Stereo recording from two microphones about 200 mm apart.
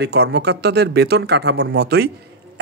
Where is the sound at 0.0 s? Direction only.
55° right (ahead or behind).